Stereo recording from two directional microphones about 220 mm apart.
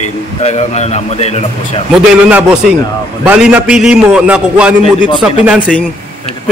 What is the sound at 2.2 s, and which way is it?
A man's voice, 5° right (ahead or behind).